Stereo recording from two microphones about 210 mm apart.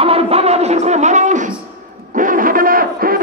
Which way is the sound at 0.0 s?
30° right (ahead or behind).